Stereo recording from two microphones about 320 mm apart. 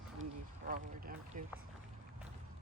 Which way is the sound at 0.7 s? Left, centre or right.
Right.